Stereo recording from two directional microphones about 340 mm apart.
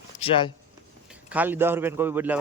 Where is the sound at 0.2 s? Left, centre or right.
Centre.